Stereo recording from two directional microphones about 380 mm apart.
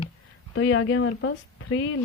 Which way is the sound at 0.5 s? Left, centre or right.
Left.